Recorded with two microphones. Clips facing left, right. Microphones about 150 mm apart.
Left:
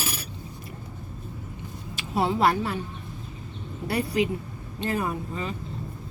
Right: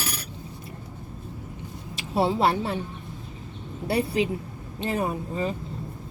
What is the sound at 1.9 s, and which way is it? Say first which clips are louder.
Speech: right 1 dB; 30° right (ahead or behind).